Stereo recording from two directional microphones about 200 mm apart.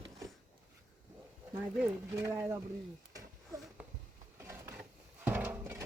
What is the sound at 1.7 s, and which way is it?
Speech, 10° right (ahead or behind).